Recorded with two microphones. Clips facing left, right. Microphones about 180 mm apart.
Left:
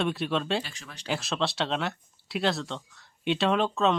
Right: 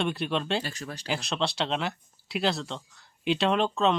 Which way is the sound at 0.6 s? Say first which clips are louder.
Right 8 dB; 40° right (ahead or behind).